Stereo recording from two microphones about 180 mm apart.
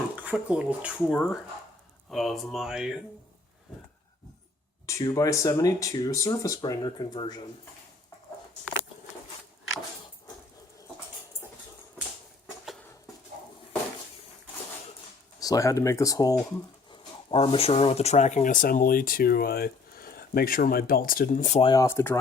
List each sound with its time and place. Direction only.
0.2 s speech: 10° right (ahead or behind)
4.9 s speech: 15° left (ahead or behind)
15.4 s speech: 20° left (ahead or behind)
16.9 s speech: 30° left (ahead or behind); by 21.6 s 45° left (ahead or behind)
21.6 s speech: 25° left (ahead or behind)